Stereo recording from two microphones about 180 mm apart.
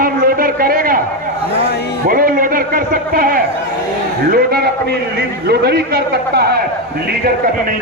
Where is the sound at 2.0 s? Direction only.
50° right (ahead or behind).